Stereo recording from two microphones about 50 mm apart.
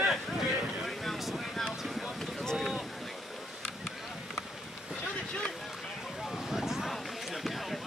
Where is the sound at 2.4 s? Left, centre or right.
Centre.